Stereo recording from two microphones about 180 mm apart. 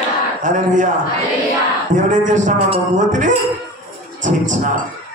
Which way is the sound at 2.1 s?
45° right (ahead or behind).